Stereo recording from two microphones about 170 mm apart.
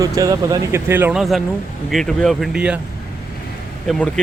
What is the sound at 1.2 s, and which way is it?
Speech, centre (ahead or behind).